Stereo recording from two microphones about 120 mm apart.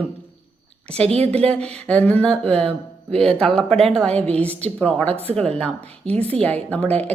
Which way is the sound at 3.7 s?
55° right (ahead or behind).